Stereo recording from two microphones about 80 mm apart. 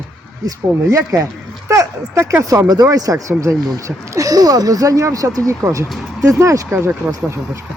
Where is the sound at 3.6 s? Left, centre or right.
Right.